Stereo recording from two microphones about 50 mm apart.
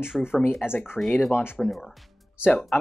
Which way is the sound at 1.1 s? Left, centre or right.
Left.